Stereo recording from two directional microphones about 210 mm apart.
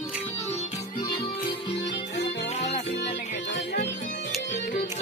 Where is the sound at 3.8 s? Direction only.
35° left (ahead or behind).